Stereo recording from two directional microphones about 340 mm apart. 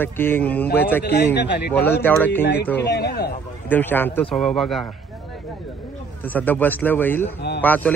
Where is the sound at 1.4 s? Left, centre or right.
Left.